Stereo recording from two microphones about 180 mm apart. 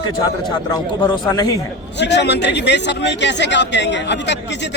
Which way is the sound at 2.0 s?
70° left (ahead or behind).